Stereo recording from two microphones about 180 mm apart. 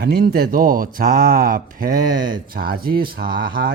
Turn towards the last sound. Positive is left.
turn(degrees=-55)  # may be behind; listen again after turning